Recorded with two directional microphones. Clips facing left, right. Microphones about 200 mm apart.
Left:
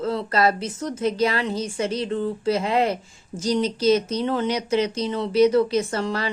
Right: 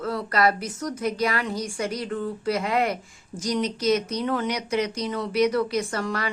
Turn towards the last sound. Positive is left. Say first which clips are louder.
# left 3 dB
turn(degrees=25)  # may be behind; listen again after turning